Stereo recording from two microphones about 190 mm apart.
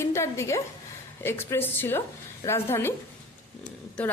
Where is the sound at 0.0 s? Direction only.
15° left (ahead or behind).